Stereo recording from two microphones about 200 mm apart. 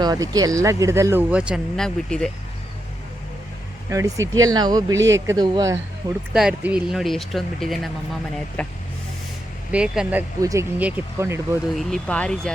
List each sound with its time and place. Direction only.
0.0 s speech: 20° right (ahead or behind); by 2.3 s 5° left (ahead or behind)
3.8 s speech: 15° right (ahead or behind)
6.3 s speech: 5° right (ahead or behind)
9.7 s speech: 5° right (ahead or behind)
11.8 s speech: 5° left (ahead or behind)